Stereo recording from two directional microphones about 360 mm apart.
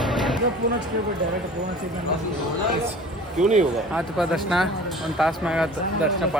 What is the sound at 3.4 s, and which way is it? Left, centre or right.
Speech, centre.